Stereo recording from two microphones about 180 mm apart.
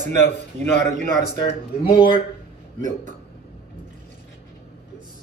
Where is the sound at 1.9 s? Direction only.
25° left (ahead or behind).